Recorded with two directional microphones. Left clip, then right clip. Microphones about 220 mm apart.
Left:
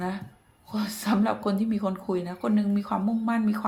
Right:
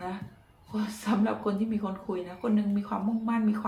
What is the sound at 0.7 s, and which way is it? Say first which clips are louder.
Speech: left 3 dB; 45° left (ahead or behind).